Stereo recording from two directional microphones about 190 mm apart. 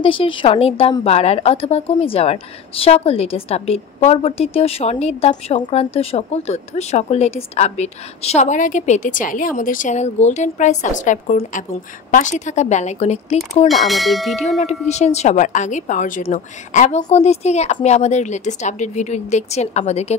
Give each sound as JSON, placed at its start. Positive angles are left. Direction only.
{"t": 0.0, "sound": "a woman's voice", "side_deg": 25}
{"t": 13.7, "sound": "speech", "side_deg": 0}
{"t": 14.9, "sound": "a woman's voice", "side_deg": 35}